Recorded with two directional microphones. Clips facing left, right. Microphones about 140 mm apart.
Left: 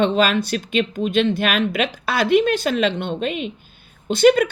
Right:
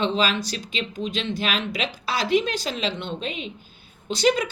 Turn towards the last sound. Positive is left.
turn(degrees=55)  # may be behind; listen again after turning